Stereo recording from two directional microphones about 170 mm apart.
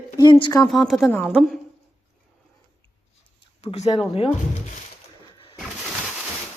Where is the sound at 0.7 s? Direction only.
Centre (ahead or behind).